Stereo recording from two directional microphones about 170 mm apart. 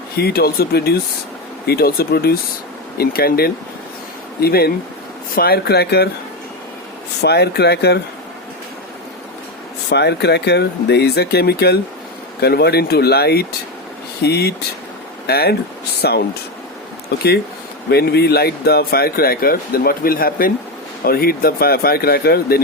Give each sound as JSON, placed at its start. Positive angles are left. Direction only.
{"t": 0.2, "sound": "speech", "side_deg": 65}
{"t": 7.2, "sound": "speech", "side_deg": 75}
{"t": 9.9, "sound": "speech", "side_deg": 80}